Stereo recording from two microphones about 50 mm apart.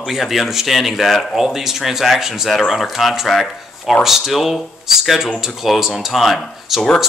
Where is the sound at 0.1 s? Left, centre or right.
Centre.